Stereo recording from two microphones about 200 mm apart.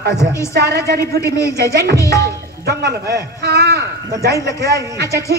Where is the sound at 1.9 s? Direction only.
15° left (ahead or behind).